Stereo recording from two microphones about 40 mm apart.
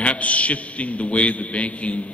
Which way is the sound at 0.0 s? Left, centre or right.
Left.